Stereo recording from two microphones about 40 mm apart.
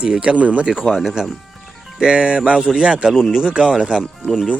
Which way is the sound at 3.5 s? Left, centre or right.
Right.